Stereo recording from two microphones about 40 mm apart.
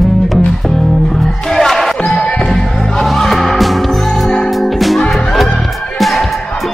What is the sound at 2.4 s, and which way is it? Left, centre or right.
Music, centre.